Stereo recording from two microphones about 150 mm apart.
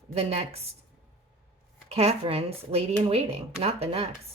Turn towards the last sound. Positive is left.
turn(degrees=-40)  # may be behind; listen again after turning